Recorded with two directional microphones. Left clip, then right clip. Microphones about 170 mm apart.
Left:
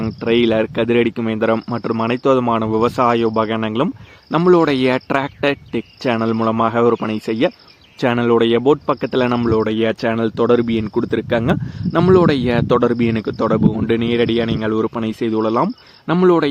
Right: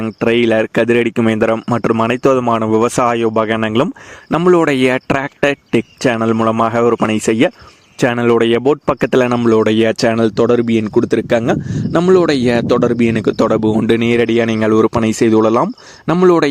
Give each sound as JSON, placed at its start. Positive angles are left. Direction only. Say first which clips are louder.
{"t": 0.2, "sound": "speech", "louder": "right 3 dB", "side_deg": -40}